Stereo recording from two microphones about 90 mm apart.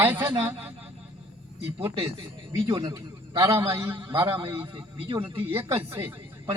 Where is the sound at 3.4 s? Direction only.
30° right (ahead or behind).